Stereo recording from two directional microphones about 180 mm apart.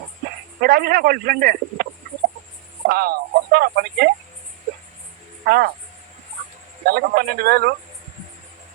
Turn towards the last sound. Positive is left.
turn(degrees=-60)  # may be behind; listen again after turning